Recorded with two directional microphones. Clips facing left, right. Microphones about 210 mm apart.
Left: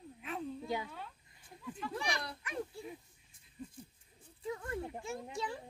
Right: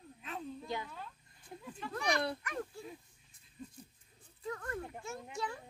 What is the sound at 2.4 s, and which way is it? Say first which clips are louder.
Speech: left 1 dB; 15° left (ahead or behind).